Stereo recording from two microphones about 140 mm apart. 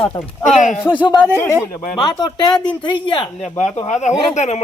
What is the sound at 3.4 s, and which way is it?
Speech, 55° left (ahead or behind).